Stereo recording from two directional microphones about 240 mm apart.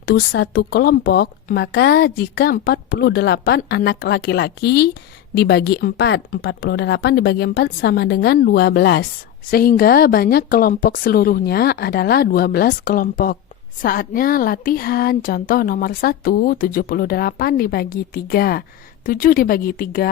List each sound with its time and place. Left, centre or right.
0.0 s speech: left